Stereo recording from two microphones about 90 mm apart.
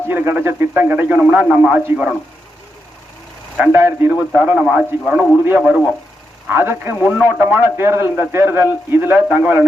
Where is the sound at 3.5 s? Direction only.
25° right (ahead or behind).